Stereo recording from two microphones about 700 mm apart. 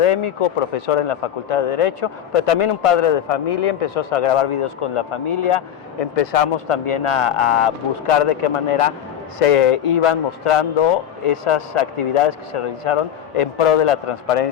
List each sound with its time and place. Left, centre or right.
0.0 s speech: left